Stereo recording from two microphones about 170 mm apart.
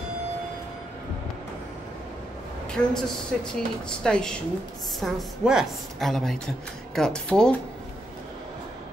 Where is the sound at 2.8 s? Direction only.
5° left (ahead or behind).